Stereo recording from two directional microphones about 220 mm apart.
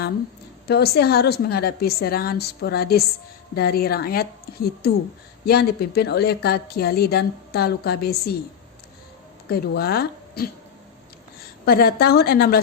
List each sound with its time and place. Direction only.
0.7 s a woman's voice: 45° left (ahead or behind)
9.5 s speech: 45° left (ahead or behind)
11.6 s a woman's voice: 45° left (ahead or behind)